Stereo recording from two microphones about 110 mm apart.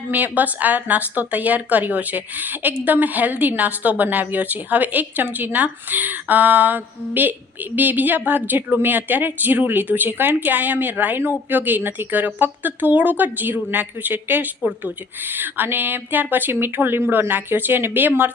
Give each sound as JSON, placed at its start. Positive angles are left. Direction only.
{"t": 0.1, "sound": "a woman's voice", "side_deg": -15}